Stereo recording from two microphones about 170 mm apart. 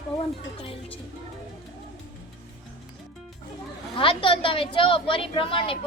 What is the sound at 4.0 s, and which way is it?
A woman's voice, 30° left (ahead or behind).